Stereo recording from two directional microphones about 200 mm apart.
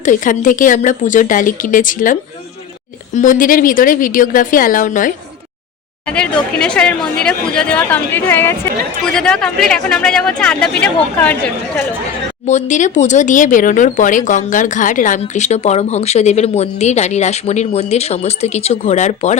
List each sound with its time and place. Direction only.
0.0 s a woman's voice: 40° left (ahead or behind)
6.1 s speech: 5° left (ahead or behind)
12.5 s speech: 35° left (ahead or behind)